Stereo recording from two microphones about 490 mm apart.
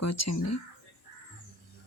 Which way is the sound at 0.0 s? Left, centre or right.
Left.